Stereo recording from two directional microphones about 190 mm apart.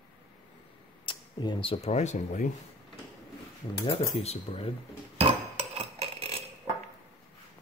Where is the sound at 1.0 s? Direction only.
25° left (ahead or behind).